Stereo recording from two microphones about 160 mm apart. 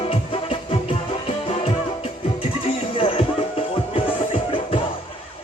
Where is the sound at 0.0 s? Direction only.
35° left (ahead or behind).